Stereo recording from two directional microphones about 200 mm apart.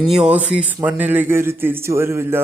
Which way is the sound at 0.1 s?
5° right (ahead or behind).